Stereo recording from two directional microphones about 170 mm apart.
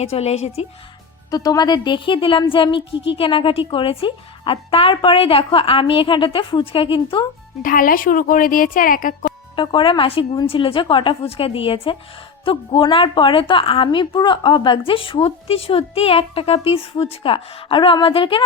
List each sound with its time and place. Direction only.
0.0 s a woman's voice: 40° left (ahead or behind)
1.3 s a woman's voice: 20° left (ahead or behind)
7.6 s speech: 55° left (ahead or behind)
9.6 s a woman's voice: 30° left (ahead or behind)